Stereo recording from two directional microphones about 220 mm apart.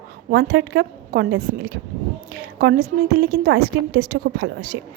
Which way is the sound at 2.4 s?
45° right (ahead or behind).